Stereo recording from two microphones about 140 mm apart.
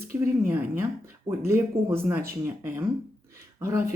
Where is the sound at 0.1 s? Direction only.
20° right (ahead or behind).